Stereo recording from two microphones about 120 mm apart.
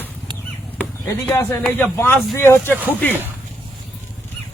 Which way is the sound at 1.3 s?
20° left (ahead or behind).